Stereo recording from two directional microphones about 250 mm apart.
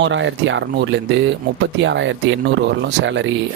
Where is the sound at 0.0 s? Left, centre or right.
Right.